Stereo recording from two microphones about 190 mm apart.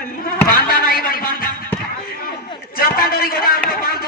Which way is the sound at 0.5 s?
50° left (ahead or behind).